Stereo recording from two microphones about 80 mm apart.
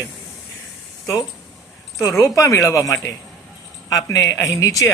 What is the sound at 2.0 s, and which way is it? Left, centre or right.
A woman's voice, left.